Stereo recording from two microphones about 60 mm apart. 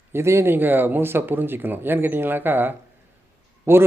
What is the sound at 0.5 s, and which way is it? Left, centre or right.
Speech, right.